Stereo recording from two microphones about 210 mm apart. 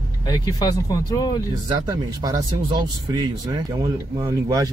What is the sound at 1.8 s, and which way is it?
Speech, 15° right (ahead or behind).